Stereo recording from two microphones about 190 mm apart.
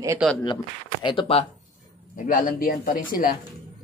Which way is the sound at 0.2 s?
Centre (ahead or behind).